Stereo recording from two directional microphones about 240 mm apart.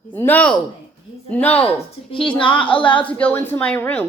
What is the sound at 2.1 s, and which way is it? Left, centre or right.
Speech, left.